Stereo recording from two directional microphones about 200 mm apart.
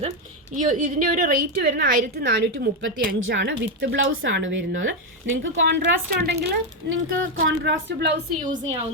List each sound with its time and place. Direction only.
0.5 s a woman's voice: 40° right (ahead or behind)
3.2 s a woman's voice: 70° right (ahead or behind)
3.4 s speech: 60° right (ahead or behind)